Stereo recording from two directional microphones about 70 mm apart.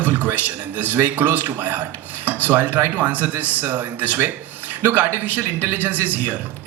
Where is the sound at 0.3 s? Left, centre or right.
Right.